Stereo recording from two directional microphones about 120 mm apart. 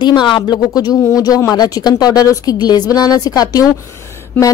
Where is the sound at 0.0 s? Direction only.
40° left (ahead or behind).